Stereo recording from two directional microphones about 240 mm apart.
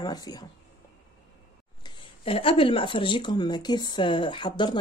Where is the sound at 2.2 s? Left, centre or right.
Left.